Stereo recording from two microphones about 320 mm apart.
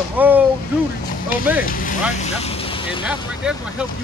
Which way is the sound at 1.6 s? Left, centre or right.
Left.